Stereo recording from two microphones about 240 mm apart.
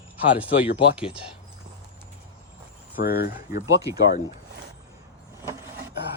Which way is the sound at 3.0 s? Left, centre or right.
Left.